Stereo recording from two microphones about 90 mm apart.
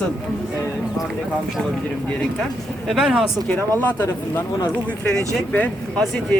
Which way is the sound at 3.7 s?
20° left (ahead or behind).